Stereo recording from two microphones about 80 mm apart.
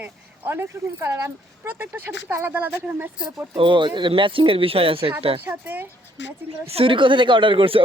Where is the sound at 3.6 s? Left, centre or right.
Right.